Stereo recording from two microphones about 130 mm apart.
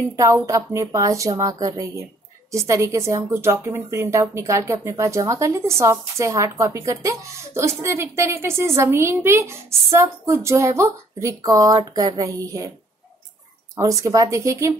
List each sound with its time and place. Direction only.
0.1 s speech: 25° right (ahead or behind)
13.7 s speech: 25° right (ahead or behind)